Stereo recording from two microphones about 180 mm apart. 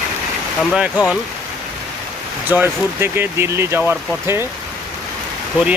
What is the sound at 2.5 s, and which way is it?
Speech, 10° right (ahead or behind).